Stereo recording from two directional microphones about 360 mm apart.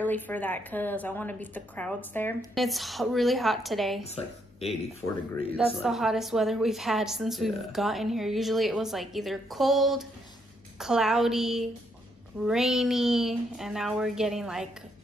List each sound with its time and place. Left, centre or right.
0.0 s a woman's voice: centre
4.0 s speech: centre
5.8 s a woman's voice: centre